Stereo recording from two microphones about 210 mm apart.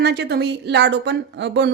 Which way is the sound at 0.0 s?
50° right (ahead or behind).